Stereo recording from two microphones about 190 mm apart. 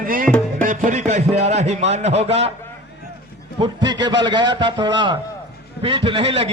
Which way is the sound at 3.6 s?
25° right (ahead or behind).